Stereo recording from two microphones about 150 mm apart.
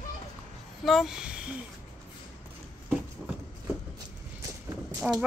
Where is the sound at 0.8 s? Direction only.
Centre (ahead or behind).